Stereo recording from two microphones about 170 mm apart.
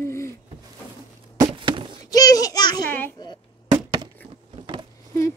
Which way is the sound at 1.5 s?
30° right (ahead or behind).